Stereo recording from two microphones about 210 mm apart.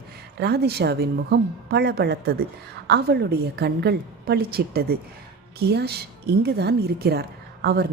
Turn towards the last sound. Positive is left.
turn(degrees=-50)  # may be behind; listen again after turning